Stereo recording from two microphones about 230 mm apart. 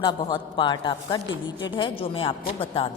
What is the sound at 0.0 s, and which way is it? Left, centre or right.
A woman's voice, centre.